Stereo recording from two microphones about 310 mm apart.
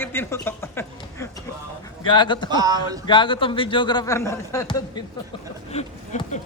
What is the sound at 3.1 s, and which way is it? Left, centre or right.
A man's voice, centre.